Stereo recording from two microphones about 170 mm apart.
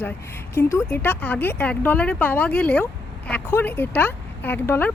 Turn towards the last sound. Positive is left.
turn(degrees=10)  # may be behind; listen again after turning